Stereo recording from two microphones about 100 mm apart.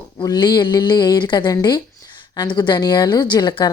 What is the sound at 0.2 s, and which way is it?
A woman's voice, 45° left (ahead or behind).